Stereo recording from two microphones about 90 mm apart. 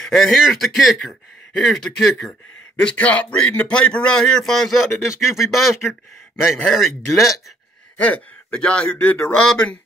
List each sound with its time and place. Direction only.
0.0 s a man's voice: 5° left (ahead or behind)
8.0 s a man's voice: 15° left (ahead or behind)